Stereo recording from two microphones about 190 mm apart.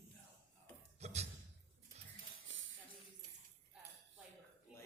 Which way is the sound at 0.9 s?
35° right (ahead or behind).